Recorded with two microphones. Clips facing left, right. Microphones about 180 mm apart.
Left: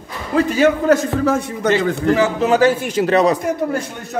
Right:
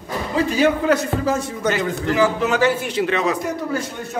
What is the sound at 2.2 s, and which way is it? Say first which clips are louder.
Speech: even; 25° left (ahead or behind).